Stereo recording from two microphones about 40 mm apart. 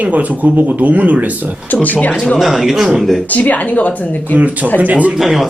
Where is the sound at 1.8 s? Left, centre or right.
Left.